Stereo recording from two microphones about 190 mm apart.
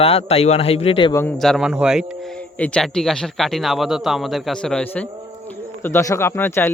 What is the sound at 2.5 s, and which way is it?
A man's voice, 5° left (ahead or behind).